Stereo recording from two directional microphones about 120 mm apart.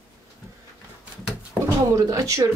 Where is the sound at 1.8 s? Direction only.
30° right (ahead or behind).